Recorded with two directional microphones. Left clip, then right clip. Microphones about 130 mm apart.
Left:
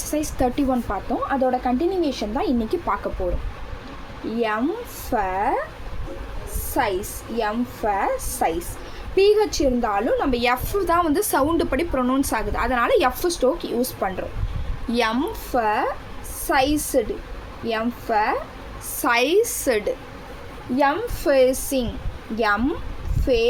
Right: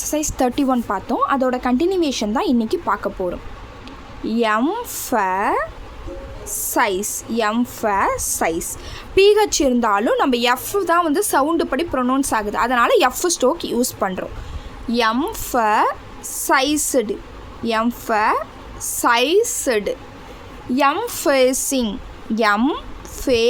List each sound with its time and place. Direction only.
0.0 s a woman's voice: 40° right (ahead or behind)
1.4 s a woman's voice: 90° right; by 2.6 s 65° right (ahead or behind)
2.6 s a woman's voice: 45° right (ahead or behind)
4.3 s a woman's voice: 70° right (ahead or behind); by 5.5 s 90° right
6.7 s a woman's voice: 85° right
10.4 s a woman's voice: 45° right (ahead or behind)
14.8 s a woman's voice: 40° right (ahead or behind)
15.3 s a woman's voice: 70° right (ahead or behind)
19.0 s a woman's voice: 45° right (ahead or behind)
20.7 s a woman's voice: 90° right; by 23.5 s 75° right (ahead or behind)